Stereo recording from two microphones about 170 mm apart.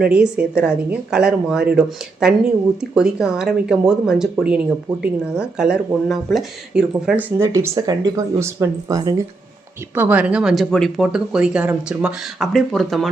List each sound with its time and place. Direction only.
0.0 s speech: 5° right (ahead or behind)
2.9 s speech: 5° right (ahead or behind); by 9.2 s 20° right (ahead or behind)
9.9 s speech: 10° right (ahead or behind)